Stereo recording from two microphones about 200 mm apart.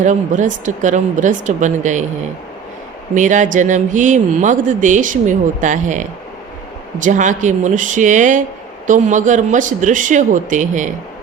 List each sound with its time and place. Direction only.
0.0 s speech: 40° right (ahead or behind)
3.2 s speech: 40° right (ahead or behind)